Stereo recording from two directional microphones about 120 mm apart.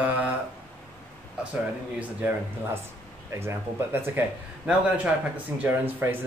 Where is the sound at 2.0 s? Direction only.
15° right (ahead or behind).